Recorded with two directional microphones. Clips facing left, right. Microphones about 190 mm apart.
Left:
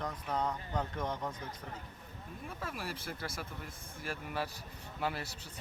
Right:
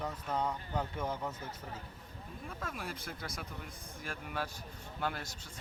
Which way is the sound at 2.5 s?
5° left (ahead or behind).